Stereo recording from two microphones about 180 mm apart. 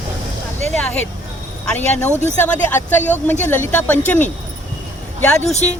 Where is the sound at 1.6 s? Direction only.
10° left (ahead or behind).